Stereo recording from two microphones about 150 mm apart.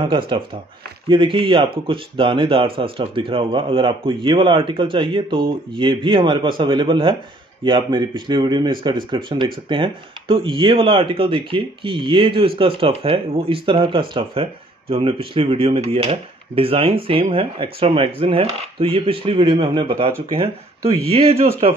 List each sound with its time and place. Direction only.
0.0 s speech: 35° right (ahead or behind)